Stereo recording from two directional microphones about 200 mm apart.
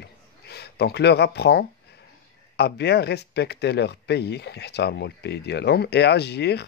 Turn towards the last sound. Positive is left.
turn(degrees=55)  # may be behind; listen again after turning